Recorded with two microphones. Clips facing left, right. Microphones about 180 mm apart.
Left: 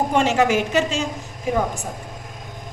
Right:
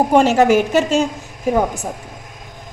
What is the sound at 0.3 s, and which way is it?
Speech, 45° right (ahead or behind).